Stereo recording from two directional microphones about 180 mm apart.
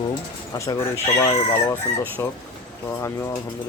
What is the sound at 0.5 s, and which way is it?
Speech, 15° left (ahead or behind).